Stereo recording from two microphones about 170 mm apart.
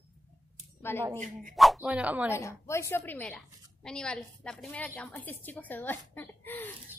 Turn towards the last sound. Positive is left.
turn(degrees=10)  # may be behind; listen again after turning